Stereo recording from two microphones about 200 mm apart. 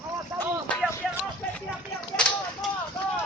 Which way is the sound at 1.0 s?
Centre (ahead or behind).